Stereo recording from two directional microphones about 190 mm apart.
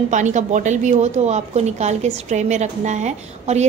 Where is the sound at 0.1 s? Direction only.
40° right (ahead or behind).